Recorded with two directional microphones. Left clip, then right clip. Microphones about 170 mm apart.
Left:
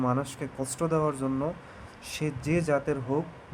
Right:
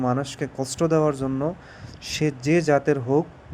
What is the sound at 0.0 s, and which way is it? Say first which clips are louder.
Speech: right 4 dB; 20° right (ahead or behind).